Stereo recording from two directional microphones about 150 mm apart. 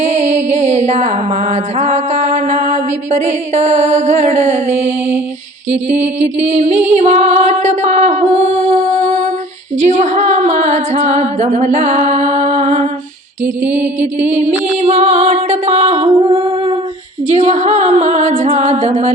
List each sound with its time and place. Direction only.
0.0 s music: 45° right (ahead or behind)
5.7 s music: 45° right (ahead or behind)
13.4 s music: 10° right (ahead or behind)
14.0 s music: 45° right (ahead or behind)
16.1 s humming: 35° right (ahead or behind)
17.2 s music: 55° right (ahead or behind)